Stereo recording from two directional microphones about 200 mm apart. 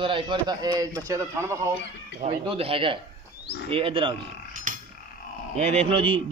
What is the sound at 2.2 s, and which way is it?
Speech, 30° right (ahead or behind).